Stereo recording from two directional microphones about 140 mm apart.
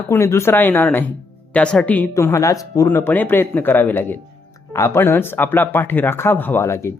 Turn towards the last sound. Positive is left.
turn(degrees=20)  # may be behind; listen again after turning